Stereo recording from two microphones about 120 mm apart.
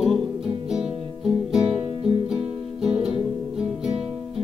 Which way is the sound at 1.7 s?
50° right (ahead or behind).